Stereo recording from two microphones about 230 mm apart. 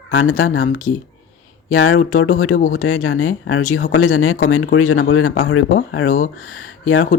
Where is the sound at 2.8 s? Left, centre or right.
Left.